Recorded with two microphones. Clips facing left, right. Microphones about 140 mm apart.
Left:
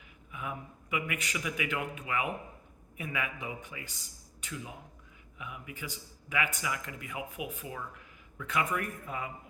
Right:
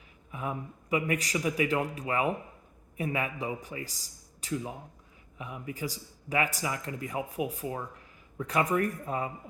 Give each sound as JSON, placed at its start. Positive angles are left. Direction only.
{"t": 0.3, "sound": "speech", "side_deg": -35}